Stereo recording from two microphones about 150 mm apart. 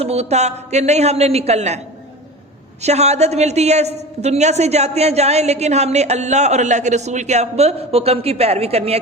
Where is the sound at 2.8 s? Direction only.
45° right (ahead or behind).